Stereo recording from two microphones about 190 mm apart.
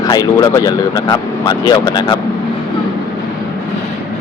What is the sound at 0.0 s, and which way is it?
Speech, 20° left (ahead or behind).